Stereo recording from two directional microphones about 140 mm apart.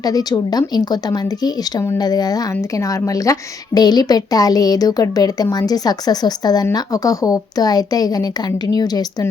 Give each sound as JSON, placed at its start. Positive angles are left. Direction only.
{"t": 0.0, "sound": "speech", "side_deg": 25}